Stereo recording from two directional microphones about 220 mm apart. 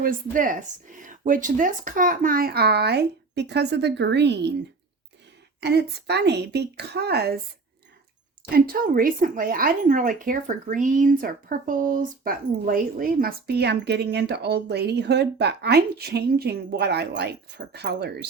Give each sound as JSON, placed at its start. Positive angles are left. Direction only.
{"t": 0.0, "sound": "speech", "side_deg": -40}
{"t": 5.5, "sound": "speech", "side_deg": -50}
{"t": 8.5, "sound": "speech", "side_deg": -40}